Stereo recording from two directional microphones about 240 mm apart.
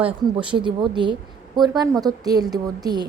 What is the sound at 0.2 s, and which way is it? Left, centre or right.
A woman's voice, centre.